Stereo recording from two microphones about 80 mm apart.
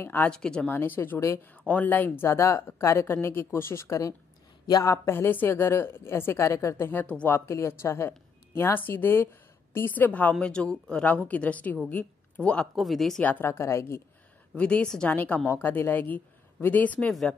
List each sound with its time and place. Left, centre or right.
0.0 s speech: left
0.3 s speech: centre
0.7 s speech: left
2.2 s a woman's voice: left
4.6 s a woman's voice: left
4.9 s a woman's voice: left
10.4 s speech: centre
12.7 s speech: centre
13.2 s speech: left
13.5 s a woman's voice: left
14.5 s speech: centre